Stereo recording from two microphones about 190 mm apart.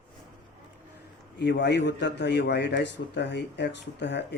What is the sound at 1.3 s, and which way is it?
Speech, 65° left (ahead or behind).